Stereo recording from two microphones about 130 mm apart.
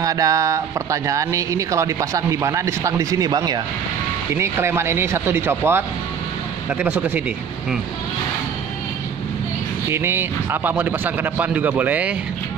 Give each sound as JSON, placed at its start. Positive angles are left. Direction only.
{"t": 0.0, "sound": "speech", "side_deg": -25}
{"t": 4.3, "sound": "a man's voice", "side_deg": -20}
{"t": 9.8, "sound": "a man's voice", "side_deg": -20}